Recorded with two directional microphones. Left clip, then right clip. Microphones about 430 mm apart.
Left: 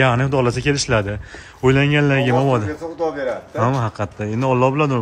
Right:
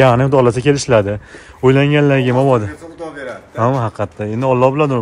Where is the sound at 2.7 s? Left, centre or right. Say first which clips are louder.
Left 6 dB; centre.